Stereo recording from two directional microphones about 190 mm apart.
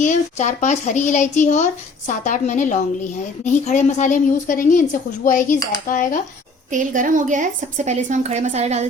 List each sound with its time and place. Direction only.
0.0 s speech: 40° left (ahead or behind)
6.7 s speech: 45° right (ahead or behind)